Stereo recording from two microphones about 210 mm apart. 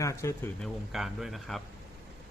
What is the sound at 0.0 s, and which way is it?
Speech, 15° left (ahead or behind).